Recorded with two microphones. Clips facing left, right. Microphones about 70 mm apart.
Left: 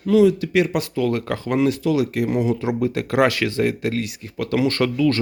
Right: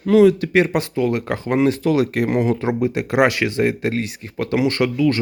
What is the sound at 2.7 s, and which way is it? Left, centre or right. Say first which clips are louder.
Speech: right 2 dB; right.